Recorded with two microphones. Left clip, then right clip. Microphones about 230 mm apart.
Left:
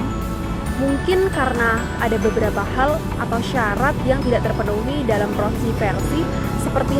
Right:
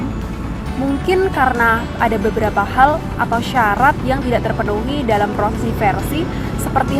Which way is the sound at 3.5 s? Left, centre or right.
Right.